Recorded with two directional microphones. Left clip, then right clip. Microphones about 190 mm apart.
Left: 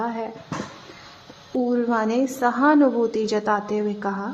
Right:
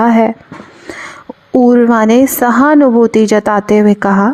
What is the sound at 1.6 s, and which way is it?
Speech, 50° right (ahead or behind).